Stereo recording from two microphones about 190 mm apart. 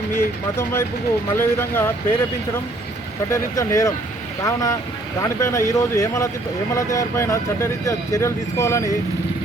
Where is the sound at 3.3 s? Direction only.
15° left (ahead or behind).